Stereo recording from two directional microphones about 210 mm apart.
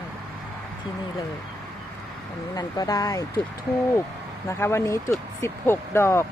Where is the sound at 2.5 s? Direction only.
20° left (ahead or behind).